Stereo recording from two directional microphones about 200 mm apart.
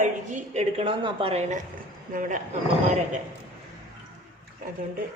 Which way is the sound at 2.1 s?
40° right (ahead or behind).